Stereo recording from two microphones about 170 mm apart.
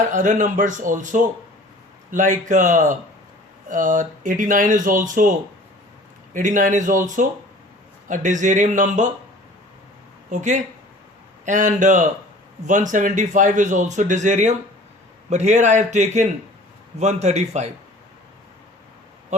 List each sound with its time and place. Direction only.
0.1 s a man's voice: 50° right (ahead or behind)
10.3 s a man's voice: 45° right (ahead or behind)